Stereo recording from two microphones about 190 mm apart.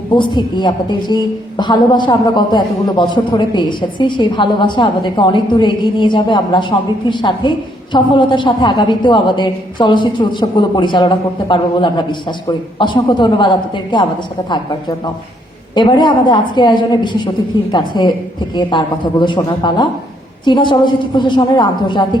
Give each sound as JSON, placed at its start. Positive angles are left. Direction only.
{"t": 0.1, "sound": "a woman's voice", "side_deg": 25}